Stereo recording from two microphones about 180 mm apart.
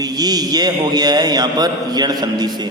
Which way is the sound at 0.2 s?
20° right (ahead or behind).